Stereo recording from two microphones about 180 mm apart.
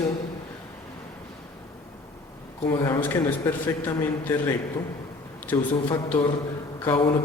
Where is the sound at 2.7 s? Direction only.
15° left (ahead or behind).